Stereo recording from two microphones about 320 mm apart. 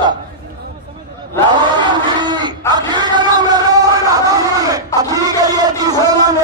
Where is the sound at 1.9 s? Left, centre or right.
Centre.